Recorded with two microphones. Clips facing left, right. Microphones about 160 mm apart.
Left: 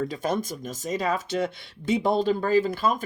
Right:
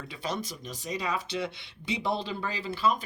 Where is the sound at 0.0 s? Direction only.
45° left (ahead or behind).